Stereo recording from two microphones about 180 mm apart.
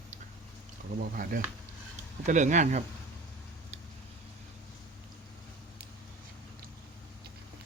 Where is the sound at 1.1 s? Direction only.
50° right (ahead or behind).